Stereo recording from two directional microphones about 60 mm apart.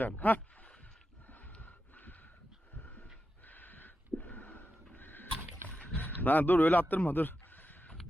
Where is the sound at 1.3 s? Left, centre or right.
Left.